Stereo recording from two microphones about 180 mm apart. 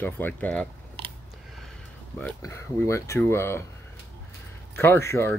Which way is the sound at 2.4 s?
15° left (ahead or behind).